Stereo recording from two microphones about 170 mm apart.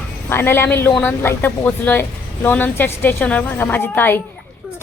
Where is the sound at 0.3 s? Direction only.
15° left (ahead or behind).